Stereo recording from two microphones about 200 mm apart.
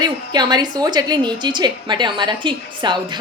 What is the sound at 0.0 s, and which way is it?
A woman's voice, 20° right (ahead or behind).